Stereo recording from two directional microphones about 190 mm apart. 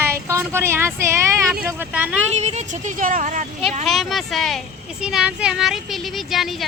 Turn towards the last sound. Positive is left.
turn(degrees=0)  # may be behind; listen again after turning